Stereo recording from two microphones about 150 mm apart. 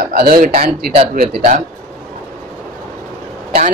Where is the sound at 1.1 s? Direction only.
65° right (ahead or behind).